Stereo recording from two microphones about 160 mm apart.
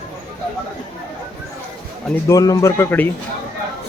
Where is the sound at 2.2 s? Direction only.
20° left (ahead or behind).